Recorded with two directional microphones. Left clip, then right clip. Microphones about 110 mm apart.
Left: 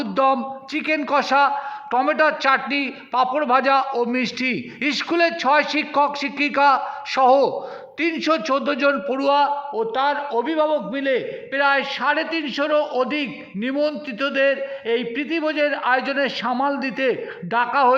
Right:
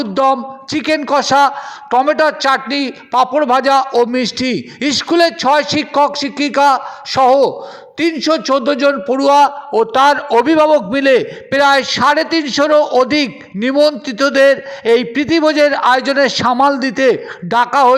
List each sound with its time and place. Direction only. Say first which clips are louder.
0.0 s speech: right 6 dB; 40° right (ahead or behind)
9.9 s a man's voice: right 11 dB; 90° right; by 17.9 s 50° right (ahead or behind)